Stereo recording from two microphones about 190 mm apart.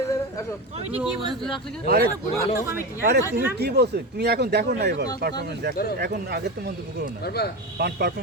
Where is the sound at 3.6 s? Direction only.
60° right (ahead or behind).